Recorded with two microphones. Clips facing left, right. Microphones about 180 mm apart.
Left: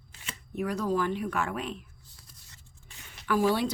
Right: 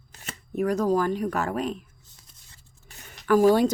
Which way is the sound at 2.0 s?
20° right (ahead or behind).